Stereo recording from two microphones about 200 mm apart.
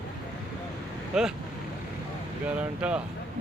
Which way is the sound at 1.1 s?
5° right (ahead or behind).